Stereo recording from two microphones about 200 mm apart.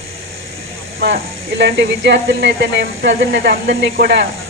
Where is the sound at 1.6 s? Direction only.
60° right (ahead or behind).